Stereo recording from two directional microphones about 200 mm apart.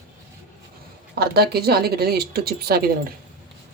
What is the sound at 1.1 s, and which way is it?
A woman's voice, 50° right (ahead or behind).